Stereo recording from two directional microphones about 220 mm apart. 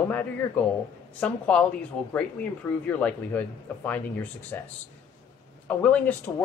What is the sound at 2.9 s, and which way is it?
Speech, 5° left (ahead or behind).